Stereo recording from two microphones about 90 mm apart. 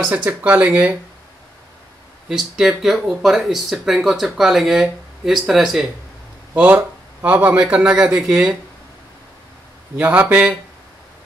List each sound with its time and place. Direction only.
0.0 s speech: 10° right (ahead or behind)
2.2 s speech: 5° right (ahead or behind)
6.5 s speech: 15° right (ahead or behind)
9.9 s speech: 15° right (ahead or behind)